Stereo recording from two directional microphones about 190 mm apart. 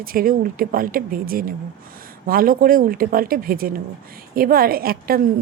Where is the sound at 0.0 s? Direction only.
50° right (ahead or behind).